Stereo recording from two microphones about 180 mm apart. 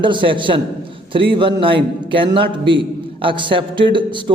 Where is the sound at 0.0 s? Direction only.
25° right (ahead or behind).